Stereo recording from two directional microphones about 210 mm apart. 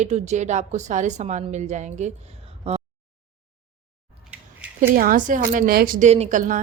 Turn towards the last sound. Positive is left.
turn(degrees=-30)  # may be behind; listen again after turning